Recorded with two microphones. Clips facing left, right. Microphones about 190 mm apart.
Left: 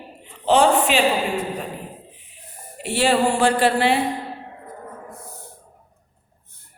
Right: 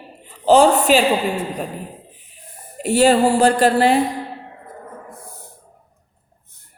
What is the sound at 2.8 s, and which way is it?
Speech, 40° right (ahead or behind).